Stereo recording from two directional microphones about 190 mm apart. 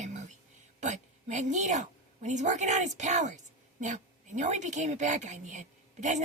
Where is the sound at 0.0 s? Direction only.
40° right (ahead or behind).